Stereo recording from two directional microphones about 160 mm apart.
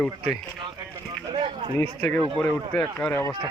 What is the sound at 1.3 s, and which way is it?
Speech, 30° right (ahead or behind).